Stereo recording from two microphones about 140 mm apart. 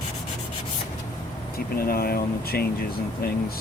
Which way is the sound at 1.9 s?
90° left.